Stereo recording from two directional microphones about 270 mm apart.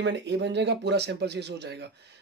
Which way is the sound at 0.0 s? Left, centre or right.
Right.